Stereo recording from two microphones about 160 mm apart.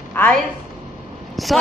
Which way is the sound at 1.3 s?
Centre (ahead or behind).